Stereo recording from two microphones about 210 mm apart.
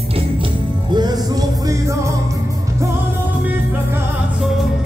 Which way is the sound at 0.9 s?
20° right (ahead or behind).